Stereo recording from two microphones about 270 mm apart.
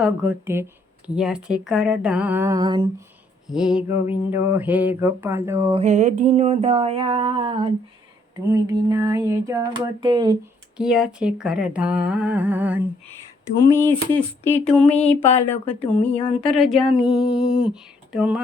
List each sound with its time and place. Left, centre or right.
0.0 s speech: centre
3.4 s speech: centre
4.1 s a sound: centre
5.8 s a sound: right
10.8 s speech: centre
13.7 s speech: centre